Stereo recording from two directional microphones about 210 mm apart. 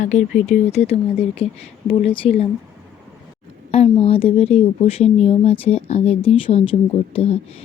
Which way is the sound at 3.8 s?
25° left (ahead or behind).